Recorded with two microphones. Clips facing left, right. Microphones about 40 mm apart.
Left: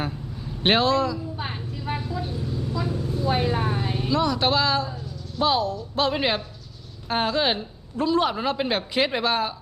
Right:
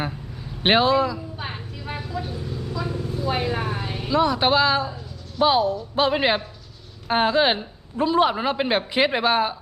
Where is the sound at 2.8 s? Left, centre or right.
Centre.